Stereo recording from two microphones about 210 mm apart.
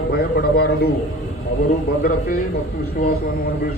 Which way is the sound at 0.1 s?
50° left (ahead or behind).